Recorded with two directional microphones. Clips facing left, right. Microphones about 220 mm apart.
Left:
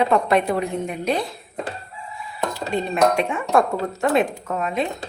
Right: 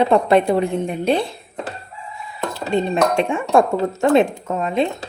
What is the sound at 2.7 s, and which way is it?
Speech, 25° right (ahead or behind).